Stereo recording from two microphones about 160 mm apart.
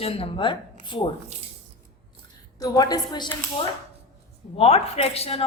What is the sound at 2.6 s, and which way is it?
Speech, 25° left (ahead or behind).